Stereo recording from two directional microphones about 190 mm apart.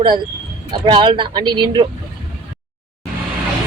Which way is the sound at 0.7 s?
25° right (ahead or behind).